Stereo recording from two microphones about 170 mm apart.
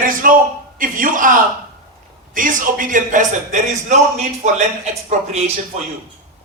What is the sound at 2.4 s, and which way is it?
A man's voice, 50° right (ahead or behind).